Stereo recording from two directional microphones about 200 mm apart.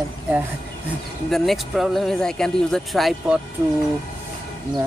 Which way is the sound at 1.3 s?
Centre (ahead or behind).